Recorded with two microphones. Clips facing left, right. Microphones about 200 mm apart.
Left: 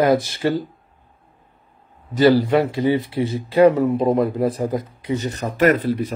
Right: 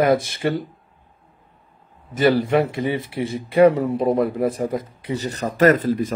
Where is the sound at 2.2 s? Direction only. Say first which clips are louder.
Left 2 dB; 20° right (ahead or behind).